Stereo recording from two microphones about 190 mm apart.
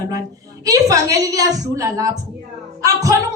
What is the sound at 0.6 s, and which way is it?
A woman's voice, 20° right (ahead or behind).